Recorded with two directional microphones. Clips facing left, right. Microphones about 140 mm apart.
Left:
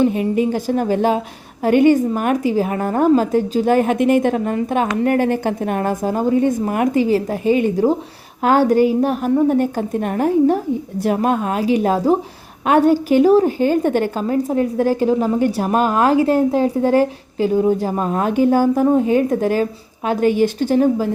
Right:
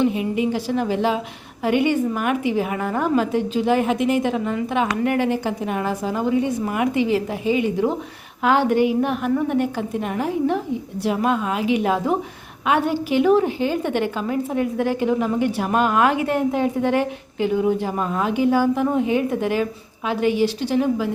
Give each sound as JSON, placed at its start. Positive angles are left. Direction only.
{"t": 0.0, "sound": "a woman's voice", "side_deg": 45}